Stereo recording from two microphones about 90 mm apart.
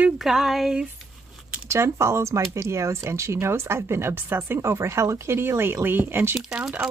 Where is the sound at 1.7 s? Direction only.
30° right (ahead or behind).